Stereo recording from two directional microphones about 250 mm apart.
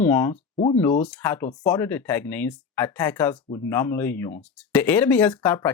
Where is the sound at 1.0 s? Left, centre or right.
Centre.